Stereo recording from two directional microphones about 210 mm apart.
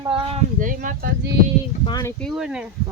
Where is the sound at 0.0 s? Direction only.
25° right (ahead or behind).